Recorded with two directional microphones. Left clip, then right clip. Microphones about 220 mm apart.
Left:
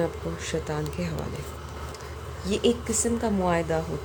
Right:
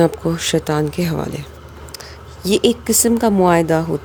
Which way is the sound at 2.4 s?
50° right (ahead or behind).